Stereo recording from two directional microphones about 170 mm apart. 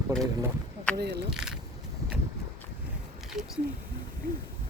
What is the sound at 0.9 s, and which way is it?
Speech, 75° right (ahead or behind).